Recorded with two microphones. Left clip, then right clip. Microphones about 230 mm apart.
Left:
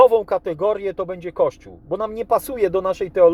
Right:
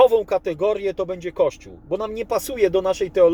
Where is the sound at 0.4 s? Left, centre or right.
Left.